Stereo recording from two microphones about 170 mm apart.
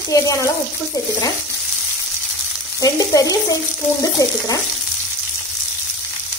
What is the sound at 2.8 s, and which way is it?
A woman's voice, 20° left (ahead or behind).